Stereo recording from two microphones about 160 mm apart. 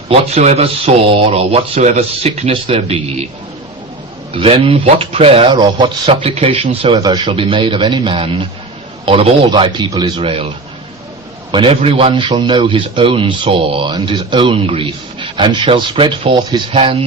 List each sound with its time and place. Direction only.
0.1 s a man's voice: 40° right (ahead or behind)
4.4 s a man's voice: 35° right (ahead or behind)
6.1 s a man's voice: 40° right (ahead or behind)
11.5 s a man's voice: 35° right (ahead or behind)